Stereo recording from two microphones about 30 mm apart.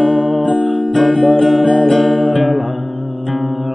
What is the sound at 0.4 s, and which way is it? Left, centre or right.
Music, left.